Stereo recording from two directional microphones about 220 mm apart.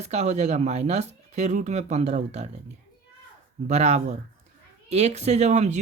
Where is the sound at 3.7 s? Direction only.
30° right (ahead or behind).